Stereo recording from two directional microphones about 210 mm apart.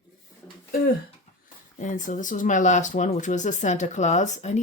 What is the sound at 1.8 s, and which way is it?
Speech, 40° left (ahead or behind).